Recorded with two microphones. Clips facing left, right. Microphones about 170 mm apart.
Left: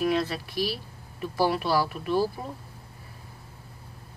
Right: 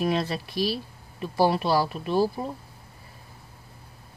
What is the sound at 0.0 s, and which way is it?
Speech, 25° right (ahead or behind).